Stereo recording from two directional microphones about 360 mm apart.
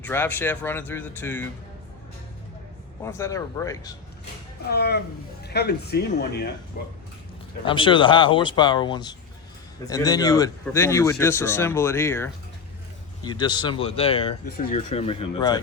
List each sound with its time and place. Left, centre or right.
0.0 s speech: centre
3.0 s speech: centre
4.7 s speech: left
7.6 s speech: centre